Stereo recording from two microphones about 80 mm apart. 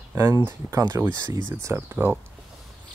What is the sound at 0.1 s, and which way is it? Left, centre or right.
Speech, right.